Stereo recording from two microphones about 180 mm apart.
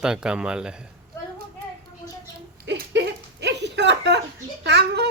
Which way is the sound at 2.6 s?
75° right (ahead or behind).